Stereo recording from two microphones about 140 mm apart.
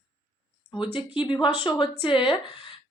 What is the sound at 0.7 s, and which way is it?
A woman's voice, 35° left (ahead or behind).